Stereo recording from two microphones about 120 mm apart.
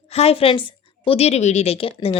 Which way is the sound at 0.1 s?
60° left (ahead or behind).